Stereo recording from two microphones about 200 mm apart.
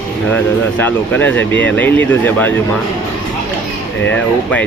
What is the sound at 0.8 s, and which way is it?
Speech, 10° left (ahead or behind).